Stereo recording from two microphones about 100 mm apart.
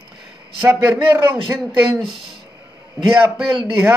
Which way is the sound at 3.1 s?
15° right (ahead or behind).